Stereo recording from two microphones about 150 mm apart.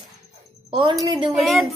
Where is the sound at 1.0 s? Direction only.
35° right (ahead or behind).